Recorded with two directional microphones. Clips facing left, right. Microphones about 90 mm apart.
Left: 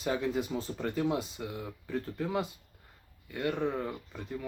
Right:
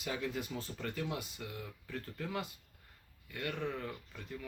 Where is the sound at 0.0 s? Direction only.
35° left (ahead or behind).